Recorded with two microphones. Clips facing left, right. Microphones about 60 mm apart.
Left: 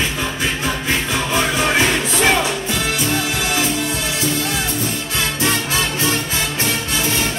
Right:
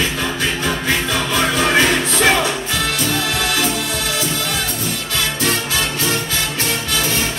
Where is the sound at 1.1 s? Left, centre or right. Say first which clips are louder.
Right 1 dB; centre.